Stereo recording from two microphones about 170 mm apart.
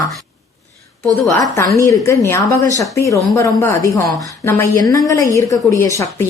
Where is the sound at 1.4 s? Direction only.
20° left (ahead or behind).